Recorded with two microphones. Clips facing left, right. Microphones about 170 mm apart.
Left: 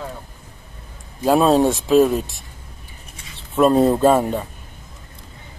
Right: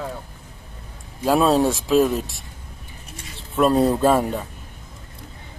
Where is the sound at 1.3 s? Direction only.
Centre (ahead or behind).